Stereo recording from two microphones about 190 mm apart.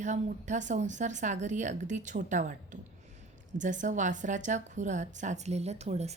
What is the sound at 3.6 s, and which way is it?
A woman's voice, 40° right (ahead or behind).